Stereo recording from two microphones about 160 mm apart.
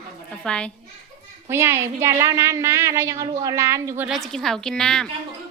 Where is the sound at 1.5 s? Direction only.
15° right (ahead or behind).